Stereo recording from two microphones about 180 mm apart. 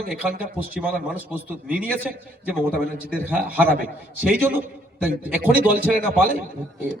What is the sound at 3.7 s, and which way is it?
Speech, 55° right (ahead or behind).